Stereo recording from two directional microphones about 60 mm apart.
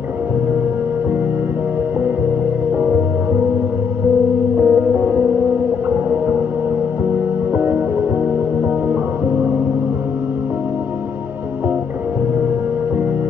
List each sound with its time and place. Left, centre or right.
4.6 s music: right
7.5 s music: right